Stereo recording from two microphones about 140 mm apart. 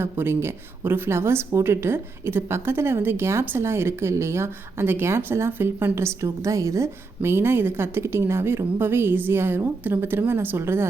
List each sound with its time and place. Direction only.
0.0 s a woman's voice: 15° right (ahead or behind)